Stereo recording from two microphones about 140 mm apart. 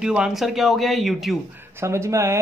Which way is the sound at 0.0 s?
5° right (ahead or behind).